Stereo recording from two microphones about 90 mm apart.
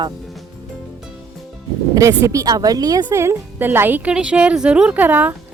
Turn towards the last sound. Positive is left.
turn(degrees=-20)  # may be behind; listen again after turning